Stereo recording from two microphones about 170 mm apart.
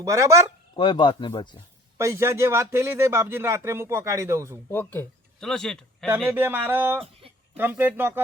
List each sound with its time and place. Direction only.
0.0 s a man's voice: 15° right (ahead or behind)
0.8 s speech: 30° left (ahead or behind)
2.0 s a man's voice: 15° right (ahead or behind)
4.7 s speech: 10° left (ahead or behind)
6.3 s a man's voice: 10° right (ahead or behind)